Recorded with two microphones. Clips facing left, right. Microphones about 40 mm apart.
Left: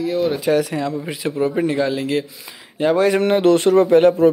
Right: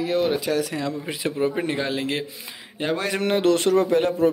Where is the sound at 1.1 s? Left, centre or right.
Centre.